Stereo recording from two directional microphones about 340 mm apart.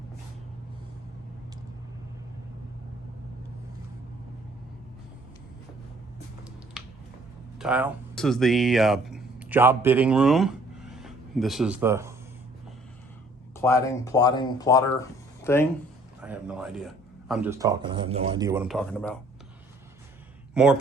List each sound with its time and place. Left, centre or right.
6.8 s a sound: centre
7.6 s speech: centre
13.6 s speech: centre
16.2 s speech: centre
20.5 s speech: centre